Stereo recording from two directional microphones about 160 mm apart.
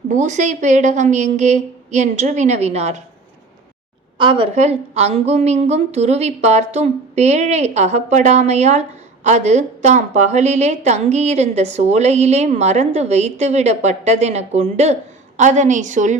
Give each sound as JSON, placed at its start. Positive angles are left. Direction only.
{"t": 0.1, "sound": "a woman's voice", "side_deg": -50}
{"t": 4.2, "sound": "a woman's voice", "side_deg": -30}
{"t": 4.5, "sound": "a woman's voice", "side_deg": -45}